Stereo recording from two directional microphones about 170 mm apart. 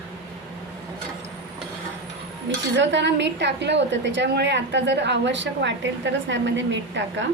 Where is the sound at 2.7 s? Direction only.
90° right.